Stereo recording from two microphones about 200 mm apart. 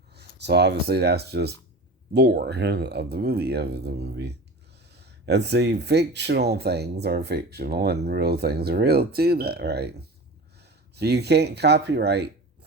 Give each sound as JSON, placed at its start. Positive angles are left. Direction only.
{"t": 0.1, "sound": "speech", "side_deg": -55}